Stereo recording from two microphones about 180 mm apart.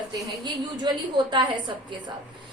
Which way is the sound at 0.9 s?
25° right (ahead or behind).